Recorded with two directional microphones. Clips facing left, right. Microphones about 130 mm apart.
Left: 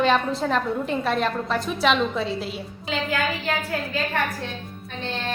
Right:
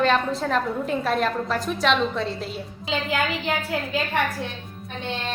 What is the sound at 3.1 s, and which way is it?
Speech, 20° right (ahead or behind).